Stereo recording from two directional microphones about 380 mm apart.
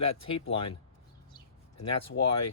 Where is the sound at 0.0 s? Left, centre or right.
Left.